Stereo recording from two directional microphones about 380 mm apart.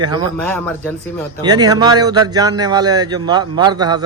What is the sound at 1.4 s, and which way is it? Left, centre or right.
A man's voice, centre.